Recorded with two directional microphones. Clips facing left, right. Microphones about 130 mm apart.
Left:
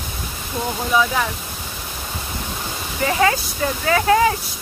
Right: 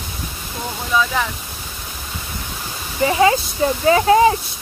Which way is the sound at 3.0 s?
20° right (ahead or behind).